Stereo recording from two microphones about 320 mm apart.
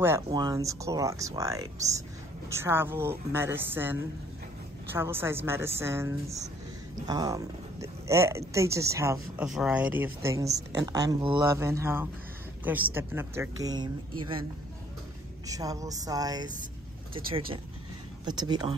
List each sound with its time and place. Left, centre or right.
0.0 s speech: centre
15.4 s speech: centre